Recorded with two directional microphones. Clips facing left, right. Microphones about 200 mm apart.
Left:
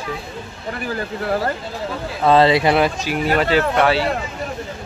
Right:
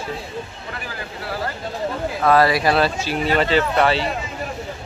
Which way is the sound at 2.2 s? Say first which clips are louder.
Left 3 dB; 25° left (ahead or behind).